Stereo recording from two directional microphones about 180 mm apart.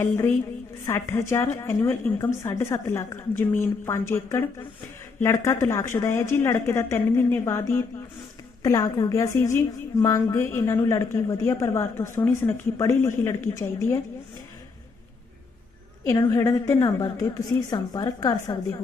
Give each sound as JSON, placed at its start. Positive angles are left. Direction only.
{"t": 0.9, "sound": "a woman's voice", "side_deg": 15}
{"t": 16.0, "sound": "a woman's voice", "side_deg": 15}